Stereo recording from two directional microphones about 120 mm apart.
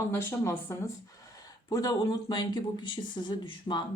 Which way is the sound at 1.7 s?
30° left (ahead or behind).